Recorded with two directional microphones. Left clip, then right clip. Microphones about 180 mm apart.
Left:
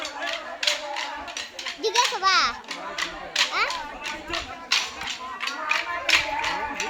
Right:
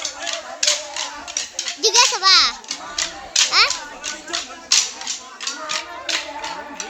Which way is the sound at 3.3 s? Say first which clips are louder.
Right 5 dB; 5° left (ahead or behind).